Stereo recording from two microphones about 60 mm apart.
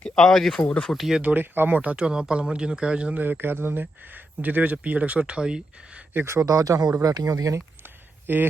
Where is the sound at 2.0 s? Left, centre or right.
Centre.